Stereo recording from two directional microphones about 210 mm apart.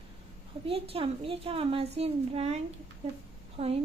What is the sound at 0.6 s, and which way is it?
A woman's voice, 25° right (ahead or behind).